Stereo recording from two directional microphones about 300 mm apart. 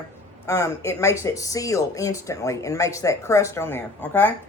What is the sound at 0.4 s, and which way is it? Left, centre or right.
Speech, centre.